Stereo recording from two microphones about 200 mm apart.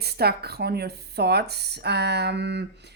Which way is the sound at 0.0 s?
55° right (ahead or behind).